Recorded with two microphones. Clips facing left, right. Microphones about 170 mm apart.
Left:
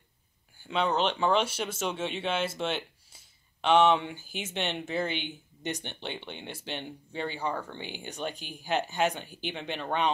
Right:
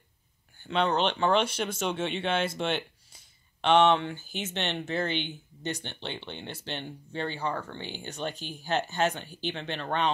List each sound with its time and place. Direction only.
0.6 s speech: 5° left (ahead or behind)